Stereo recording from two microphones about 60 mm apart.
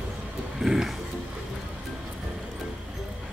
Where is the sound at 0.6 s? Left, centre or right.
Centre.